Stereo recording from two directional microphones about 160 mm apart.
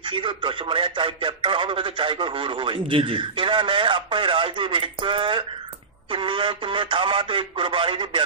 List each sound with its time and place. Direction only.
0.0 s speech: 30° right (ahead or behind)